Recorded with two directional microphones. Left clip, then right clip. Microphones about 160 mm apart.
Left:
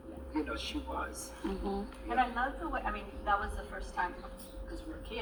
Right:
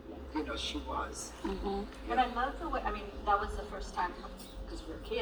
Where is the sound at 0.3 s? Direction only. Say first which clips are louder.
Even; 20° left (ahead or behind).